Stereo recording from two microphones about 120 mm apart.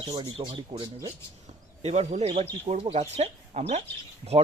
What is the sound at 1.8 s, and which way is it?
Speech, 65° right (ahead or behind).